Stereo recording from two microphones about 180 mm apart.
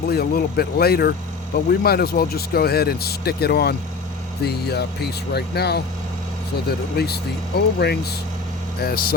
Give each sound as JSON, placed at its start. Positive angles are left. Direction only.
{"t": 0.1, "sound": "speech", "side_deg": 60}